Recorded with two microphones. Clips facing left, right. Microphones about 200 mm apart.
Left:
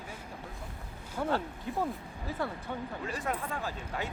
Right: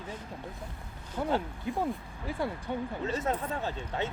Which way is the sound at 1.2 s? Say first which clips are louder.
Right 1 dB; 10° right (ahead or behind).